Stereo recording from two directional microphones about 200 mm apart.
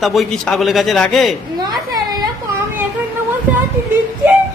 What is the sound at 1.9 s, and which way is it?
Whimper, 20° right (ahead or behind).